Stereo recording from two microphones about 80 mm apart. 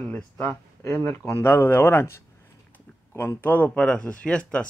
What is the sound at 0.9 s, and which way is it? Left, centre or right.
Speech, left.